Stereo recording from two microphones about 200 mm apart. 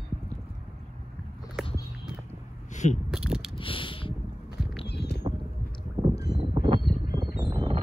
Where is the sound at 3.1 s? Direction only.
5° right (ahead or behind).